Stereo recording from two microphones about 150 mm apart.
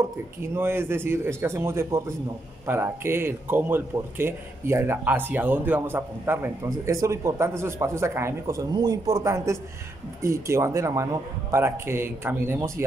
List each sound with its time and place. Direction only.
0.4 s a man's voice: 15° right (ahead or behind)